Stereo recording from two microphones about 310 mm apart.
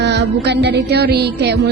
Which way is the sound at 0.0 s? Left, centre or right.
Right.